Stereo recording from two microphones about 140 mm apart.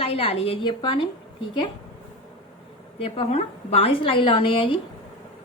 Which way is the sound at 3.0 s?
45° left (ahead or behind).